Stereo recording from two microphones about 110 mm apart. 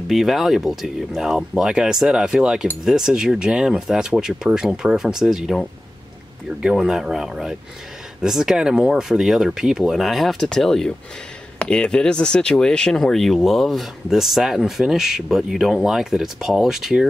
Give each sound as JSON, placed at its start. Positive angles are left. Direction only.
{"t": 0.1, "sound": "speech", "side_deg": 0}